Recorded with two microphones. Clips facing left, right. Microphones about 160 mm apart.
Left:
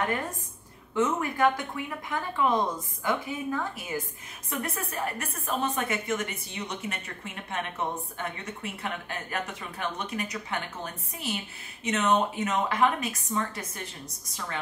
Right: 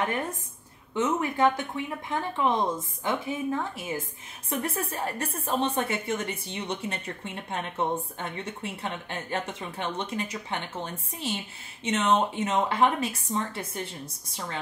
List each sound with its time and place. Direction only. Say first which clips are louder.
0.9 s a woman's voice: even; 20° right (ahead or behind)